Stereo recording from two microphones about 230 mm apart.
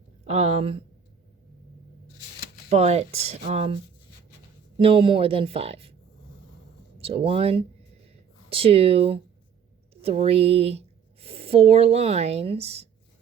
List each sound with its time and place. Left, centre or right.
0.3 s speech: right
2.6 s speech: right
4.8 s speech: right
7.0 s speech: right